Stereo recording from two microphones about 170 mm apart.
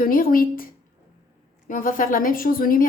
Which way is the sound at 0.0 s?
55° left (ahead or behind).